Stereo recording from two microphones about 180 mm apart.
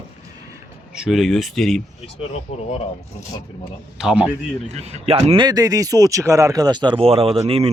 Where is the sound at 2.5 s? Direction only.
35° left (ahead or behind).